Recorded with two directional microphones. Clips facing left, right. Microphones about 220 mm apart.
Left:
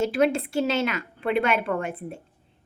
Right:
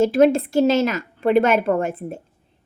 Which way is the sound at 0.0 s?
40° right (ahead or behind).